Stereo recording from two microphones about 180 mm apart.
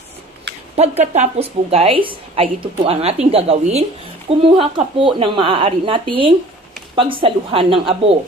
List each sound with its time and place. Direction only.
0.8 s a woman's voice: 35° right (ahead or behind)